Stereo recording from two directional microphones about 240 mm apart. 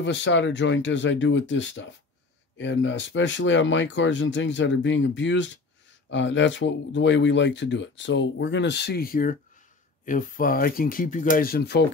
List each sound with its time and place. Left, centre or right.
0.0 s speech: left